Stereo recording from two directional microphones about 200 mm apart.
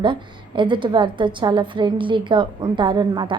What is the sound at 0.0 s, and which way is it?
A woman's voice, 25° right (ahead or behind).